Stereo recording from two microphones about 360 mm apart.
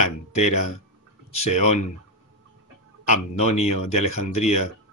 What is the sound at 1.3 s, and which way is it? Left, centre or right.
Speech, centre.